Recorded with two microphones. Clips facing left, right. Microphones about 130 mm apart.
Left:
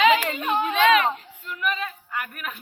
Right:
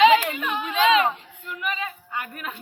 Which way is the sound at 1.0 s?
20° right (ahead or behind).